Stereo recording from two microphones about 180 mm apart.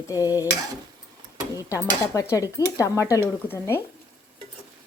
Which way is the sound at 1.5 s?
15° left (ahead or behind).